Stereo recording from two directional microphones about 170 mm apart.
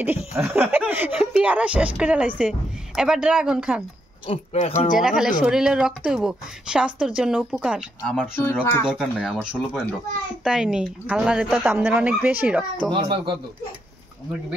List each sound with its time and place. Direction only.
0.0 s a woman's voice: 10° right (ahead or behind)
4.3 s speech: 35° left (ahead or behind)
4.9 s a woman's voice: 5° right (ahead or behind)
8.4 s speech: 15° left (ahead or behind)
8.8 s a woman's voice: centre (ahead or behind)
12.9 s speech: 30° right (ahead or behind)